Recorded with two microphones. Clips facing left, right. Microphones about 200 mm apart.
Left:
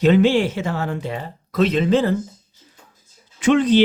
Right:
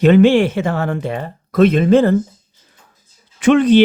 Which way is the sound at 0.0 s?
60° right (ahead or behind).